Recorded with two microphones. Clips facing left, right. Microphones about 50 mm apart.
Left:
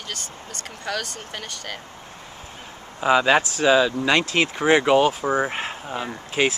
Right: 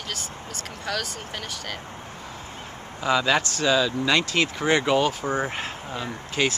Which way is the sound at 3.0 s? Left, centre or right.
Centre.